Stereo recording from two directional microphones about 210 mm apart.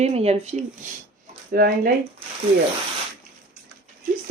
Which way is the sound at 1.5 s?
45° right (ahead or behind).